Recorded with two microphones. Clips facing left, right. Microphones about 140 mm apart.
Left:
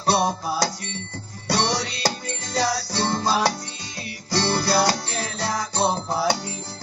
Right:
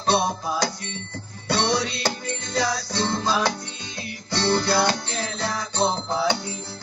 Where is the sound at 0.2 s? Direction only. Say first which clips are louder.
Left 2 dB; 35° left (ahead or behind).